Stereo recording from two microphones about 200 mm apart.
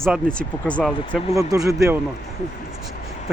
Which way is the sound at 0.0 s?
5° left (ahead or behind).